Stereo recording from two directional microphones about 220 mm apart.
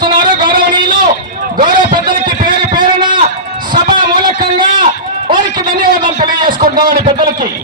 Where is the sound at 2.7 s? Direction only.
20° right (ahead or behind).